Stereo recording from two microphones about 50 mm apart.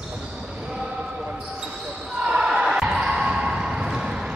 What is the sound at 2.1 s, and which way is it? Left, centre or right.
Basketball bounce, centre.